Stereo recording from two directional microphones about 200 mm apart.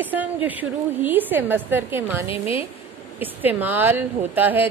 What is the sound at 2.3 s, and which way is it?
Speech, 30° left (ahead or behind).